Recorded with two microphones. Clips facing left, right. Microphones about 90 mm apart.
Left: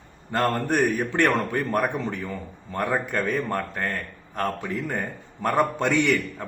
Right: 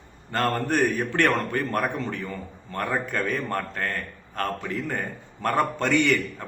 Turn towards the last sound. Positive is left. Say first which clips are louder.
# even
turn(degrees=15)  # may be behind; listen again after turning